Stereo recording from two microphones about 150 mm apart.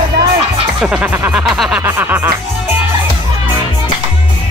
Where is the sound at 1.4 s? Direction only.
5° right (ahead or behind).